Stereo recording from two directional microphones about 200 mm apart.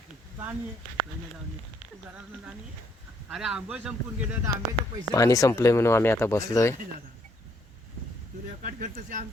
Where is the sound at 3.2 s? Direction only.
5° right (ahead or behind).